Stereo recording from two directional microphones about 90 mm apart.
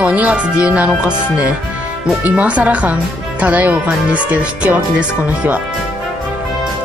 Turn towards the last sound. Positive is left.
turn(degrees=-15)  # may be behind; listen again after turning